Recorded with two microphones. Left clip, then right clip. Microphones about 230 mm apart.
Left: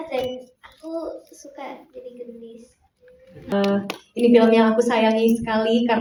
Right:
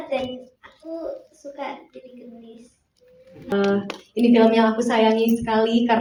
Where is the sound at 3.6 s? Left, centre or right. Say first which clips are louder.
Right 1 dB; left.